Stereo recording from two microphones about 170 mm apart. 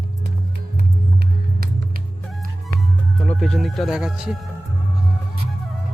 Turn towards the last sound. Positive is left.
turn(degrees=-5)  # may be behind; listen again after turning